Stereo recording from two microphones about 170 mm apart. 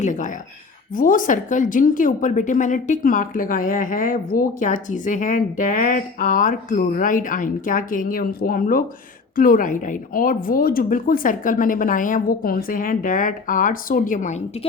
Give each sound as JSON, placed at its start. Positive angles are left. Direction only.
{"t": 0.0, "sound": "speech", "side_deg": 50}